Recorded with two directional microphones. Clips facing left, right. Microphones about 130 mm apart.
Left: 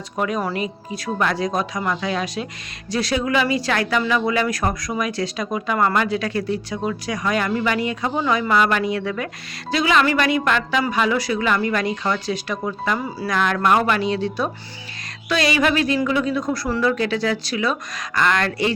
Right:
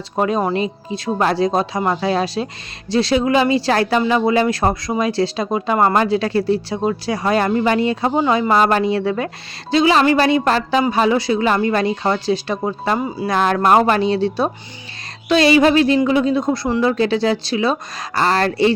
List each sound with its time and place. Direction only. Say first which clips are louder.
0.2 s speech: right 5 dB; 30° right (ahead or behind)